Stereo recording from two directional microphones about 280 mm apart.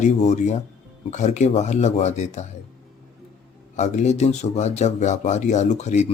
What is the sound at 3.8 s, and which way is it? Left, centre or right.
Speech, left.